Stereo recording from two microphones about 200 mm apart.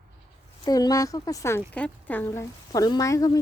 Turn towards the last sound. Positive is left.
turn(degrees=15)  # may be behind; listen again after turning